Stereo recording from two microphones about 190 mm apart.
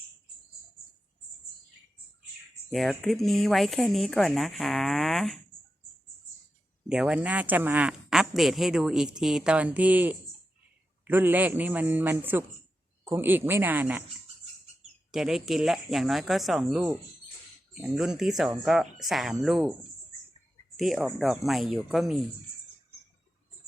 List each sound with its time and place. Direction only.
2.6 s a woman's voice: centre (ahead or behind)
6.8 s a woman's voice: 5° right (ahead or behind)
15.1 s a woman's voice: centre (ahead or behind)
20.7 s a woman's voice: centre (ahead or behind)